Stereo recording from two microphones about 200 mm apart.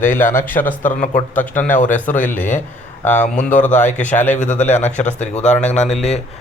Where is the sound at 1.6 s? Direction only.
40° left (ahead or behind).